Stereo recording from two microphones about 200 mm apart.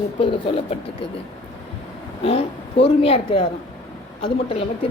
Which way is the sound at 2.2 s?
30° left (ahead or behind).